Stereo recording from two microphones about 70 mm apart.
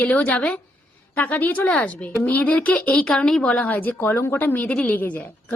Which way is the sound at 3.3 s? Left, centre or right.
Centre.